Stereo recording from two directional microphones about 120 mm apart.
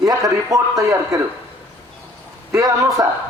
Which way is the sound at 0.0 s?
25° right (ahead or behind).